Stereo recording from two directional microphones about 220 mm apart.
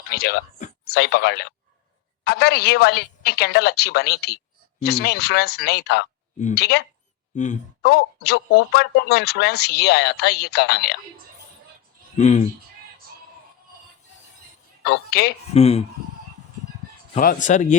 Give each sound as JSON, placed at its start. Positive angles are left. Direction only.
{"t": 0.1, "sound": "a man's voice", "side_deg": 45}
{"t": 7.3, "sound": "speech", "side_deg": 35}
{"t": 7.8, "sound": "a man's voice", "side_deg": 45}
{"t": 12.1, "sound": "speech", "side_deg": 30}
{"t": 14.8, "sound": "a man's voice", "side_deg": 45}
{"t": 15.5, "sound": "speech", "side_deg": 30}
{"t": 17.2, "sound": "speech", "side_deg": 35}